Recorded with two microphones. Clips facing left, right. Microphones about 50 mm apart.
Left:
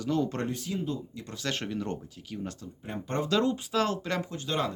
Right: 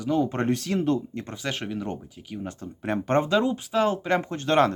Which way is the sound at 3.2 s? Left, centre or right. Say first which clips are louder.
Right 3 dB; centre.